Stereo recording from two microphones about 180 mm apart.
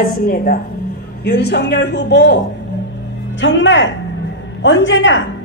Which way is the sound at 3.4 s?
90° left.